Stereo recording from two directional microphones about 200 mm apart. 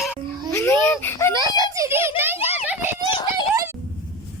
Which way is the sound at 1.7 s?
15° right (ahead or behind).